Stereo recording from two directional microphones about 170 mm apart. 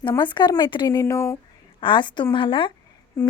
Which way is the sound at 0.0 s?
25° left (ahead or behind).